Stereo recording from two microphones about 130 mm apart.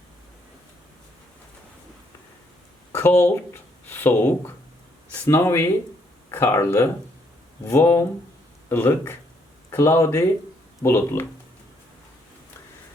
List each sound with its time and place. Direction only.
2.9 s speech: 20° left (ahead or behind)